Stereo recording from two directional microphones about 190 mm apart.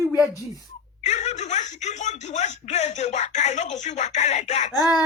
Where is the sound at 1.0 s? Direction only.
35° left (ahead or behind).